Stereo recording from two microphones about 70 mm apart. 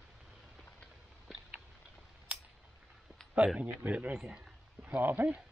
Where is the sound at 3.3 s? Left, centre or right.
Centre.